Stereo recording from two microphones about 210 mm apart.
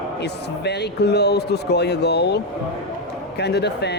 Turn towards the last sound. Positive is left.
turn(degrees=55)  # may be behind; listen again after turning